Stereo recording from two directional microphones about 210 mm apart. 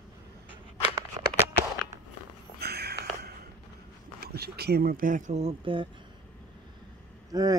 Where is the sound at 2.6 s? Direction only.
50° right (ahead or behind).